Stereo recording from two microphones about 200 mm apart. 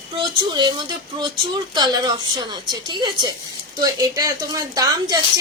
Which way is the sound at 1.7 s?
20° right (ahead or behind).